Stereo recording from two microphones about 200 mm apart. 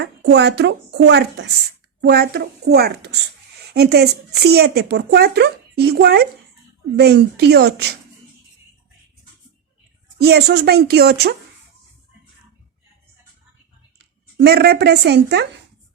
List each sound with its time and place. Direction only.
0.0 s speech: 60° right (ahead or behind)
10.2 s speech: 55° right (ahead or behind)
14.4 s speech: 55° right (ahead or behind)